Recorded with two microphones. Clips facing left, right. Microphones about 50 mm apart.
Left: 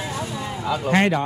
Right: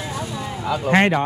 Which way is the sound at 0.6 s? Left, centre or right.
Centre.